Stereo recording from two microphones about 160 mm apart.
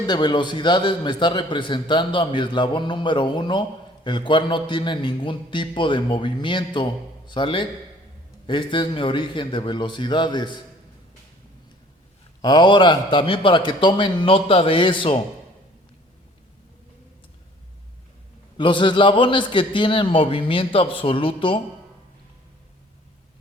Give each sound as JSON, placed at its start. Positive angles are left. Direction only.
{"t": 0.1, "sound": "a man's voice", "side_deg": 30}
{"t": 12.4, "sound": "a man's voice", "side_deg": 25}
{"t": 18.5, "sound": "a man's voice", "side_deg": 30}